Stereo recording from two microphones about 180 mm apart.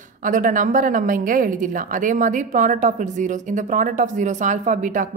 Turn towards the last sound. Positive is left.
turn(degrees=-50)  # may be behind; listen again after turning